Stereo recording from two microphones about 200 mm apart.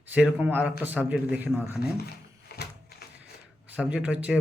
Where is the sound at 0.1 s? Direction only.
5° right (ahead or behind).